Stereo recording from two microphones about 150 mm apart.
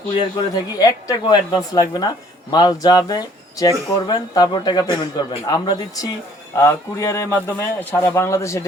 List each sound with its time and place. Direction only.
0.2 s speech: 30° left (ahead or behind)